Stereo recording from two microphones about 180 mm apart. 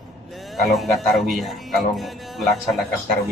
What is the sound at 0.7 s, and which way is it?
Speech, centre (ahead or behind).